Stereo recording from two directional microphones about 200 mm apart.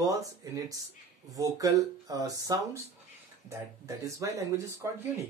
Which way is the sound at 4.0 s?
15° right (ahead or behind).